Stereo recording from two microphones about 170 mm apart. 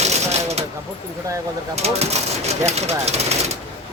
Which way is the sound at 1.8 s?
40° right (ahead or behind).